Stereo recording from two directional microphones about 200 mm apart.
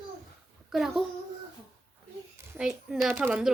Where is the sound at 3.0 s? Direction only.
Centre (ahead or behind).